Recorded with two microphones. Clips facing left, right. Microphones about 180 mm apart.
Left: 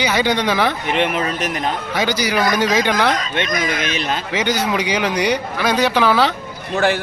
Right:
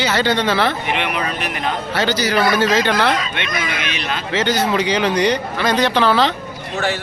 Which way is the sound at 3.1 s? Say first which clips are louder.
Left 2 dB; 40° left (ahead or behind).